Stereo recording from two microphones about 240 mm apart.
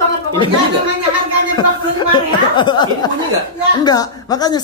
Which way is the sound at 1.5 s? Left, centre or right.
Centre.